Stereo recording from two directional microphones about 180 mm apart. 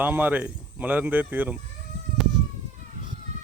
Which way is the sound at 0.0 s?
10° right (ahead or behind).